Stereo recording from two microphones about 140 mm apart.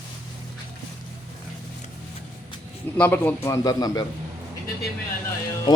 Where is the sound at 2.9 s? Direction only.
10° left (ahead or behind).